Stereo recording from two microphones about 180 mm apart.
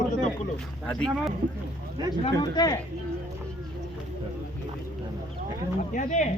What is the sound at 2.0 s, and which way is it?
Speech, 25° right (ahead or behind).